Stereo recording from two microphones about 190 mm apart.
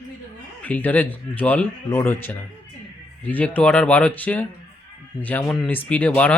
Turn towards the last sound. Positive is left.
turn(degrees=5)  # may be behind; listen again after turning